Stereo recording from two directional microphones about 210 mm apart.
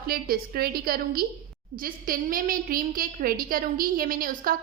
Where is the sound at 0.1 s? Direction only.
45° right (ahead or behind).